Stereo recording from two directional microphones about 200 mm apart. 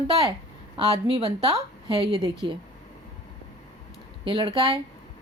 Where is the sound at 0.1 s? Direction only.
30° right (ahead or behind).